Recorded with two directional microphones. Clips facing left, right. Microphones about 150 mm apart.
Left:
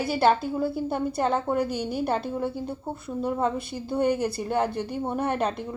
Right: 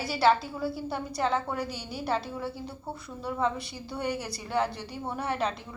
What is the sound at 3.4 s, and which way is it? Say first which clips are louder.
A woman's voice: left 3 dB; 50° left (ahead or behind).